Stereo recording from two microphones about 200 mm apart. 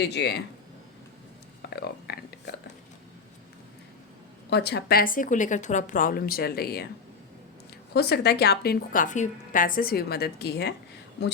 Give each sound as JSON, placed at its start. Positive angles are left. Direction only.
{"t": 0.0, "sound": "speech", "side_deg": 55}
{"t": 1.7, "sound": "speech", "side_deg": 55}
{"t": 4.4, "sound": "a woman's voice", "side_deg": 60}
{"t": 7.9, "sound": "a woman's voice", "side_deg": 55}